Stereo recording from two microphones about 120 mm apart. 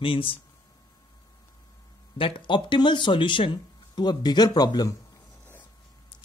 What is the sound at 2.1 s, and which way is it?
Speech, 45° left (ahead or behind).